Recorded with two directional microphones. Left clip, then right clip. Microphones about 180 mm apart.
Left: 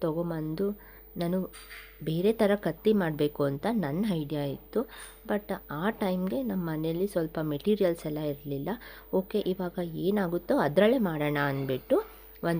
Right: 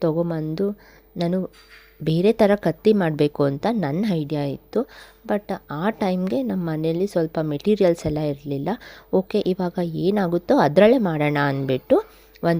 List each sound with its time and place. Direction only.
0.0 s speech: 40° right (ahead or behind)